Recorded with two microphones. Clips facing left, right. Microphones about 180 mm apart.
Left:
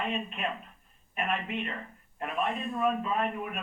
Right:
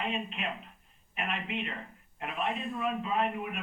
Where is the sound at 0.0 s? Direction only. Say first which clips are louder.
Left 2 dB; 45° left (ahead or behind).